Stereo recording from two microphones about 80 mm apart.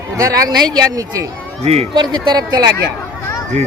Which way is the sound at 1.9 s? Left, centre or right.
Right.